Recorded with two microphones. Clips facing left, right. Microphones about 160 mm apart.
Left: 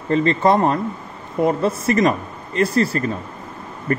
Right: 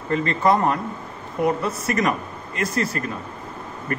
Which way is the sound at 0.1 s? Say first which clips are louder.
Left 4 dB; 25° left (ahead or behind).